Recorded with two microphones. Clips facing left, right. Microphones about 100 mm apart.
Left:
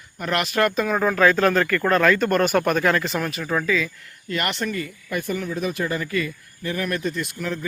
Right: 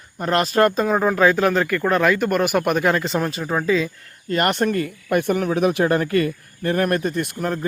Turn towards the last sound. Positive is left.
turn(degrees=-50)  # may be behind; listen again after turning